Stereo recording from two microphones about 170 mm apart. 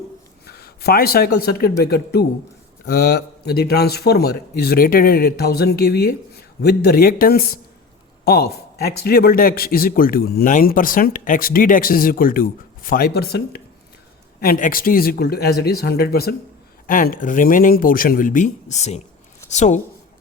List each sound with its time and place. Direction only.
0.4 s speech: 65° left (ahead or behind)
16.8 s speech: 55° left (ahead or behind)